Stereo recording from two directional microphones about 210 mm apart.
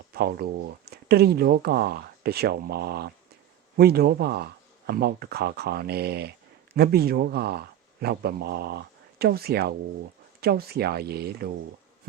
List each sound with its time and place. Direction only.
0.1 s a man's voice: 50° right (ahead or behind)